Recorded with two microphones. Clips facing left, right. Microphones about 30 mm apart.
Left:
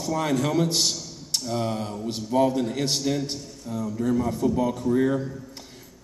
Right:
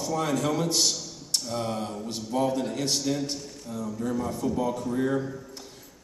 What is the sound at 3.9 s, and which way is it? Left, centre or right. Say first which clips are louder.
A man's voice: left 6 dB; centre.